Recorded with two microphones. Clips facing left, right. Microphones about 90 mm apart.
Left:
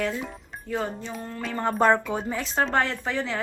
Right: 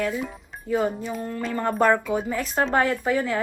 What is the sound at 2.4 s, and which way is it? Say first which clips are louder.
Speech: right 1 dB; 5° right (ahead or behind).